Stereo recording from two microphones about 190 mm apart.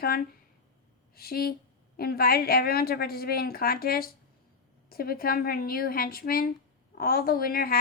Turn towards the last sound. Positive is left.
turn(degrees=50)  # may be behind; listen again after turning